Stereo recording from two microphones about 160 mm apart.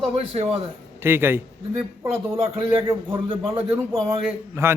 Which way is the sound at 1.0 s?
15° right (ahead or behind).